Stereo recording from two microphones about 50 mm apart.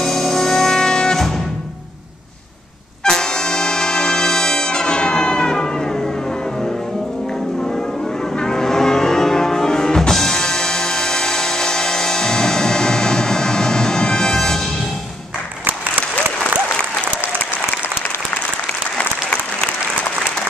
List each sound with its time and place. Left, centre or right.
0.0 s music: centre
3.0 s brass instrument: centre
8.4 s music: centre